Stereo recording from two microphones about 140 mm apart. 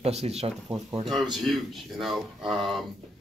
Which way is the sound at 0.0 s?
50° right (ahead or behind).